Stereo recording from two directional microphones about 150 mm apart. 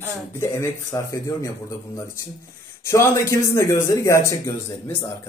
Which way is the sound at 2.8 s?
20° left (ahead or behind).